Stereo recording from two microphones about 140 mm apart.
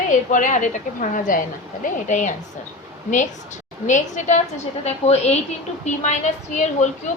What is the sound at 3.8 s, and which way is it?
A woman's voice, 60° left (ahead or behind).